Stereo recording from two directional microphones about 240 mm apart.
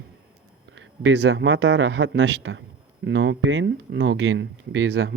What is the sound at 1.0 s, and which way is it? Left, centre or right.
Speech, right.